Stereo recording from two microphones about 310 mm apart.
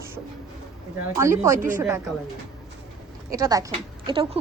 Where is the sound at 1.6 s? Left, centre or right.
Right.